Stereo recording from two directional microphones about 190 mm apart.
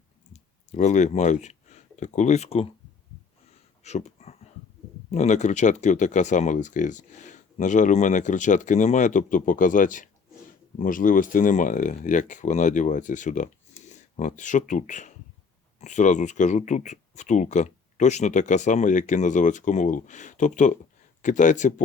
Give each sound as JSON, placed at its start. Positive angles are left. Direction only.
{"t": 0.7, "sound": "speech", "side_deg": 40}
{"t": 3.8, "sound": "a sound", "side_deg": 35}
{"t": 5.1, "sound": "speech", "side_deg": 40}